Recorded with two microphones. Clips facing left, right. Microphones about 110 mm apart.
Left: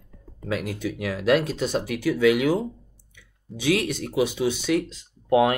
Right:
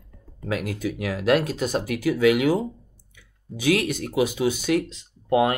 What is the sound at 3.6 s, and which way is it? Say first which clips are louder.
Speech: right 1 dB; 50° right (ahead or behind).